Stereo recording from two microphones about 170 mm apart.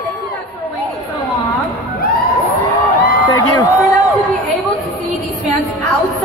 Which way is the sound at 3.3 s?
20° left (ahead or behind).